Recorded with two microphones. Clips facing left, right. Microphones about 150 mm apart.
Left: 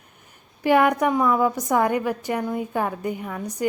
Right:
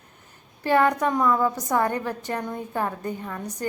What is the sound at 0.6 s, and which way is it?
A woman's voice, 15° left (ahead or behind).